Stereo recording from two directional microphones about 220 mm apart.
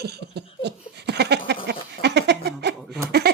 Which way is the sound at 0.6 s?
50° right (ahead or behind).